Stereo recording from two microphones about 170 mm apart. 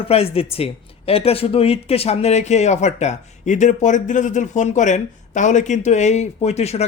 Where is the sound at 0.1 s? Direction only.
35° left (ahead or behind).